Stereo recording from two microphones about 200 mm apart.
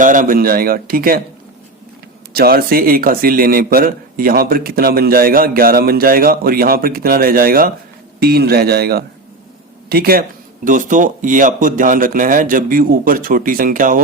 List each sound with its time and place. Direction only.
0.0 s a man's voice: 40° right (ahead or behind)
2.3 s a man's voice: 50° right (ahead or behind)